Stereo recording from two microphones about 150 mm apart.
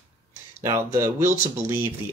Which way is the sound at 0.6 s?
20° right (ahead or behind).